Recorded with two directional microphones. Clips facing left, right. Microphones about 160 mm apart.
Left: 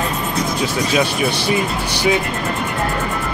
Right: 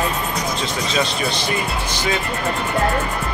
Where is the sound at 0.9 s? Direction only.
10° left (ahead or behind).